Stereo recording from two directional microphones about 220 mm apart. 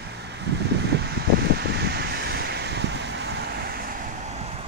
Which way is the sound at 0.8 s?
50° right (ahead or behind).